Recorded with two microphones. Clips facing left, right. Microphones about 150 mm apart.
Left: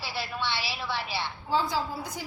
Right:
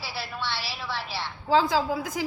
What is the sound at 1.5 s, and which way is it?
Speech, 90° right.